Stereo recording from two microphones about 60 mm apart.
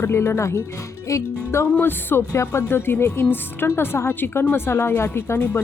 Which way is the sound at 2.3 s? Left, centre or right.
Left.